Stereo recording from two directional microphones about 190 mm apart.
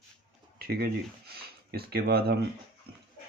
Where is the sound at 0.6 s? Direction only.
55° right (ahead or behind).